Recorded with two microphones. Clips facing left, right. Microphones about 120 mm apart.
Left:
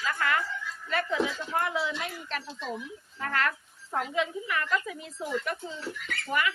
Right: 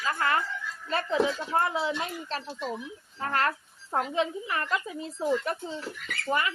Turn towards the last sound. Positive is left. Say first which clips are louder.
# right 1 dB
turn(degrees=-30)  # may be behind; listen again after turning